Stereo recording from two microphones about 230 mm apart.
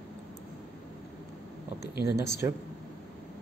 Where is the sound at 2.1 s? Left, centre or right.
Left.